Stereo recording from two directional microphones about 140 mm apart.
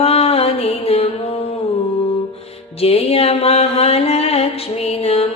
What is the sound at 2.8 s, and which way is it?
Music, 45° left (ahead or behind).